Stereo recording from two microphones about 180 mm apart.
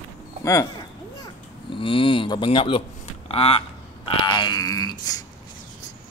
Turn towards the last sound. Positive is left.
turn(degrees=20)  # may be behind; listen again after turning